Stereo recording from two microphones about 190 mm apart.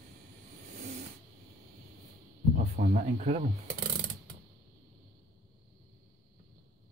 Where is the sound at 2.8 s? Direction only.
40° right (ahead or behind).